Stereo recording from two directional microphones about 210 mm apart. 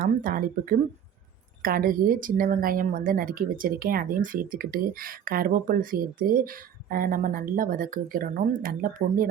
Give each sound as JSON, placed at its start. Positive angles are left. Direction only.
{"t": 0.0, "sound": "speech", "side_deg": -40}